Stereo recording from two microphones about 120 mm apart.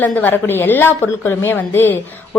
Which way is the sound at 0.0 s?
15° left (ahead or behind).